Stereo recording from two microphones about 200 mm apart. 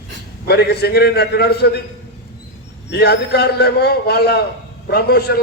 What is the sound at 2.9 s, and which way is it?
A man's voice, 55° left (ahead or behind).